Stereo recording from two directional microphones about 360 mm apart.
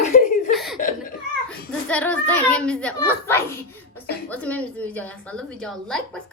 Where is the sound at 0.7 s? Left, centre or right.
Left.